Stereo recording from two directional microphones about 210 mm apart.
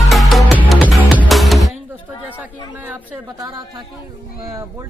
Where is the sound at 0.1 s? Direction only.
Centre (ahead or behind).